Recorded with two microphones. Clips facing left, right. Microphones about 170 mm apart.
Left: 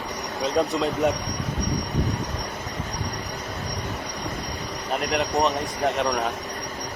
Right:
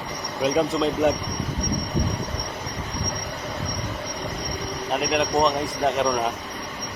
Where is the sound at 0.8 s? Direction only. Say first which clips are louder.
Right 2 dB; 10° left (ahead or behind).